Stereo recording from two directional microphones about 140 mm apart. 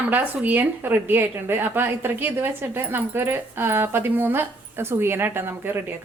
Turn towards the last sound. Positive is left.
turn(degrees=-15)  # may be behind; listen again after turning